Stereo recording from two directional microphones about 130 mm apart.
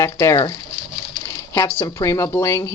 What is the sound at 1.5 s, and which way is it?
Speech, 25° left (ahead or behind).